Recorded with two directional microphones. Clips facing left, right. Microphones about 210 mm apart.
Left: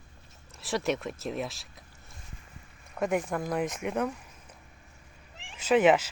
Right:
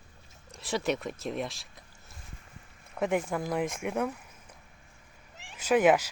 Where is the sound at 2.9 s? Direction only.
Centre (ahead or behind).